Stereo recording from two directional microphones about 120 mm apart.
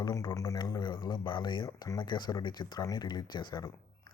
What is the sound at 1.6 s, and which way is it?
Speech, 30° left (ahead or behind).